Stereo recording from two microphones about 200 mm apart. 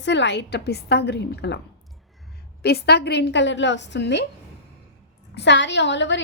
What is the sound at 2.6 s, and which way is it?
A woman's voice, 55° left (ahead or behind).